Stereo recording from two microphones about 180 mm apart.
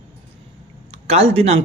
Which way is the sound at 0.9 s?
35° right (ahead or behind).